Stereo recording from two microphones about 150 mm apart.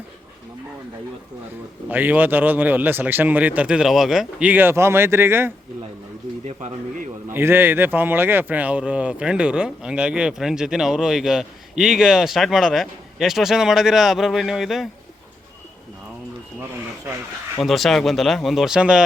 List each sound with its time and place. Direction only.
1.9 s speech: 10° right (ahead or behind)
6.4 s speech: 50° right (ahead or behind)
7.3 s speech: 15° right (ahead or behind)
17.6 s speech: centre (ahead or behind)